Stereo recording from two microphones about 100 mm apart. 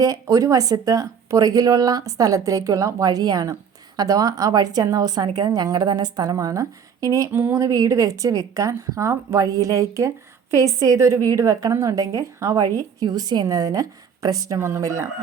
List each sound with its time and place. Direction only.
0.0 s a woman's voice: 35° right (ahead or behind)